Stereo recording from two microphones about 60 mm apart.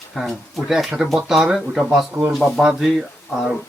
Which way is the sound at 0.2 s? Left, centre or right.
Centre.